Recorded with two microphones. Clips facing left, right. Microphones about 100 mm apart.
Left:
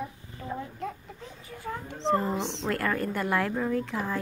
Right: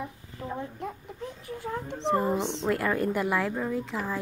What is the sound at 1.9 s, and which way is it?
Speech, 20° right (ahead or behind).